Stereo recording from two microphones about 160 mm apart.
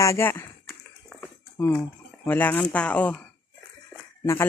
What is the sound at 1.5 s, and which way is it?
Speech, 15° left (ahead or behind).